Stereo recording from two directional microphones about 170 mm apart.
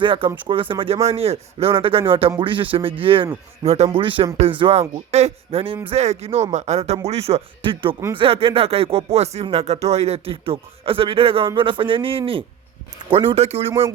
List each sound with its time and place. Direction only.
0.0 s speech: 30° right (ahead or behind)
13.7 s speech: 15° right (ahead or behind)